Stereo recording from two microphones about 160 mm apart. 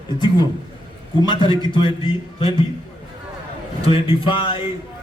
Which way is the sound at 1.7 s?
35° left (ahead or behind).